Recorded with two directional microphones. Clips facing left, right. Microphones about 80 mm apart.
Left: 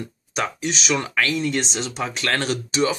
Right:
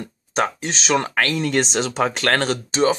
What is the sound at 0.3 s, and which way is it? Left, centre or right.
Speech, right.